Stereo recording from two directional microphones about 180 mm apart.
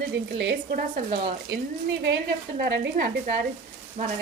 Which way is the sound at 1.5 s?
80° right.